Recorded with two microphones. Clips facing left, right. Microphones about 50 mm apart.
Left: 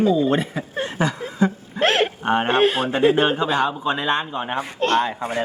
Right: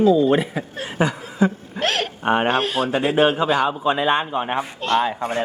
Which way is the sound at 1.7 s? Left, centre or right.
Left.